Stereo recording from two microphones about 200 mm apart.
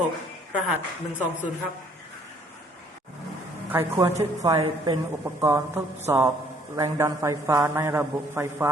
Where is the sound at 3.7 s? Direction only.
15° right (ahead or behind).